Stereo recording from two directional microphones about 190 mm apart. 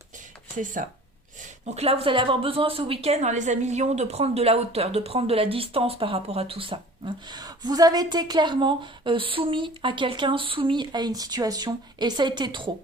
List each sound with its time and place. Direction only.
0.5 s a woman's voice: 45° right (ahead or behind); by 12.7 s 25° right (ahead or behind)